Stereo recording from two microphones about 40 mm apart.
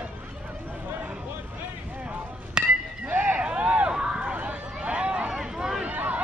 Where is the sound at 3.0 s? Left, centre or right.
Right.